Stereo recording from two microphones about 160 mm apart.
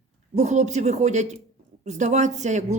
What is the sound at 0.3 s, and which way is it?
Speech, 45° right (ahead or behind).